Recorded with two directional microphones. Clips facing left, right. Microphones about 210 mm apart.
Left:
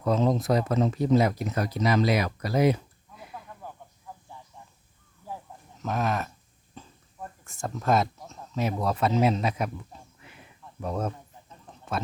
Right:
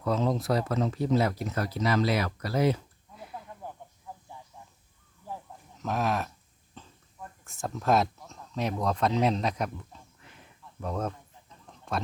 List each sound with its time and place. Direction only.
0.0 s speech: 20° left (ahead or behind)
5.7 s speech: centre (ahead or behind)
6.8 s a sound: 10° left (ahead or behind)
7.4 s speech: centre (ahead or behind)
10.8 s a man's voice: 10° left (ahead or behind)